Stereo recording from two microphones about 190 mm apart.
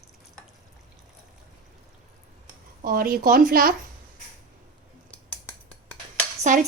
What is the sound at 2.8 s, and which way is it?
Speech, 50° right (ahead or behind).